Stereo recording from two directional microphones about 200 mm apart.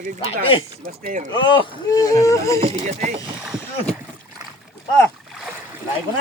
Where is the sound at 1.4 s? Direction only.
25° left (ahead or behind).